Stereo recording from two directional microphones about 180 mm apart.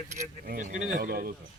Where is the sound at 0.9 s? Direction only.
50° right (ahead or behind).